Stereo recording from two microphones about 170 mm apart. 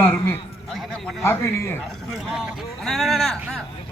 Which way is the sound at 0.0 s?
10° left (ahead or behind).